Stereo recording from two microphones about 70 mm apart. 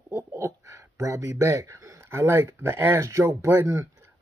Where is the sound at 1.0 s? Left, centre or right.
Right.